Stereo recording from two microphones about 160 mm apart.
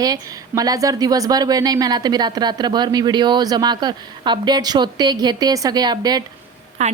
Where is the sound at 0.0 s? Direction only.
25° right (ahead or behind).